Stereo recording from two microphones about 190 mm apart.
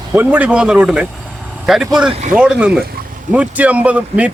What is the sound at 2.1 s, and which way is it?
Speech, 35° right (ahead or behind).